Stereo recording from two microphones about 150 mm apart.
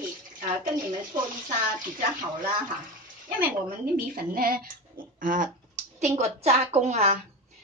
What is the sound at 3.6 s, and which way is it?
Speech, 70° right (ahead or behind).